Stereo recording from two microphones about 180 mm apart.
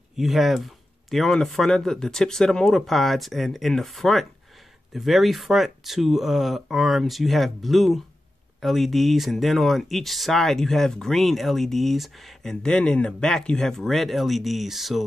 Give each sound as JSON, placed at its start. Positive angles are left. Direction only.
{"t": 0.2, "sound": "speech", "side_deg": 0}